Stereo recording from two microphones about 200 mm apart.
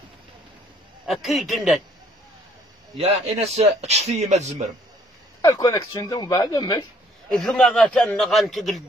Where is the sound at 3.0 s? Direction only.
30° right (ahead or behind).